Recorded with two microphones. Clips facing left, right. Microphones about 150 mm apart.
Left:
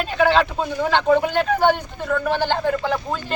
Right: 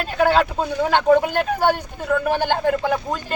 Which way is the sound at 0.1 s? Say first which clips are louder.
Right 1 dB; 45° right (ahead or behind).